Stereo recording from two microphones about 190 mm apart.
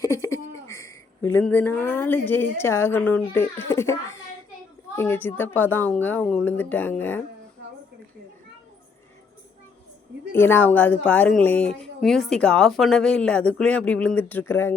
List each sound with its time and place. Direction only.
0.0 s speech: 15° left (ahead or behind)
4.9 s a woman's voice: 10° left (ahead or behind)
10.3 s a woman's voice: 10° left (ahead or behind)